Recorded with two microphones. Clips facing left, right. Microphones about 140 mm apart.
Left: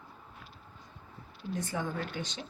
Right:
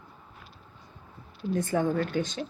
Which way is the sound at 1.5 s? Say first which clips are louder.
Right 9 dB; 50° right (ahead or behind).